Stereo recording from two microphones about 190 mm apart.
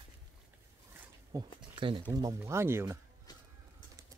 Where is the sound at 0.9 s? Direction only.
20° right (ahead or behind).